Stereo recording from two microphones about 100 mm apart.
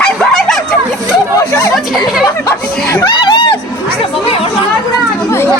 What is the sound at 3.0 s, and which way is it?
Music, 45° left (ahead or behind).